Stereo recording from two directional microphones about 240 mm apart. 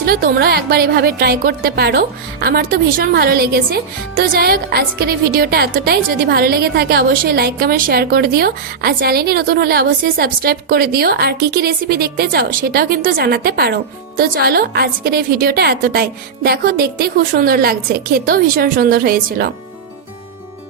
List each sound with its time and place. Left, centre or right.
0.0 s speech: right